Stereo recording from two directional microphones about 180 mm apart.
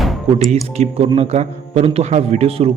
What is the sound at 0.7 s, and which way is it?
A man's voice, 35° right (ahead or behind).